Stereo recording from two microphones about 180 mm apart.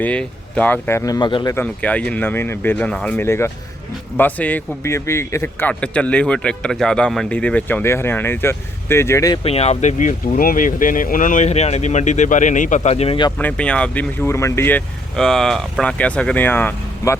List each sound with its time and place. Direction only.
0.0 s speech: 5° left (ahead or behind); by 1.5 s 25° left (ahead or behind)
1.5 s speech: 10° left (ahead or behind)
9.4 s speech: 35° left (ahead or behind)
13.4 s speech: 5° left (ahead or behind)